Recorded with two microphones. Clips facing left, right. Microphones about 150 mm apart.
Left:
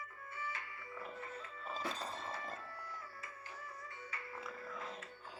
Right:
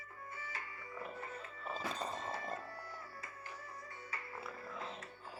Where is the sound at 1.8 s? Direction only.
40° right (ahead or behind).